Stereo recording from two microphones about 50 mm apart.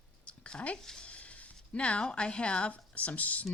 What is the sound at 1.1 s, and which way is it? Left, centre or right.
Speech, left.